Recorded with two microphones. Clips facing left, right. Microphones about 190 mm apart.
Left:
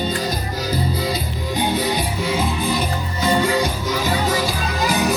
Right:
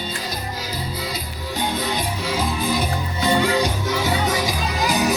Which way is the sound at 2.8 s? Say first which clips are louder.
Left 1 dB; 15° right (ahead or behind).